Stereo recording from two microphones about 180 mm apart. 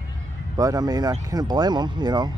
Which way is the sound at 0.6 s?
20° right (ahead or behind).